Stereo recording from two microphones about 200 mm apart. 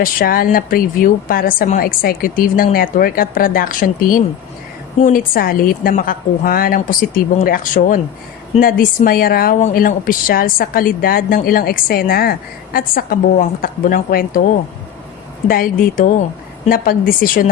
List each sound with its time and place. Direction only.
0.0 s a woman's voice: 45° left (ahead or behind)
15.4 s a woman's voice: 45° left (ahead or behind)